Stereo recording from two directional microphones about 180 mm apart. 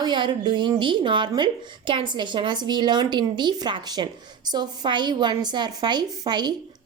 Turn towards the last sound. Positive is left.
turn(degrees=-25)  # may be behind; listen again after turning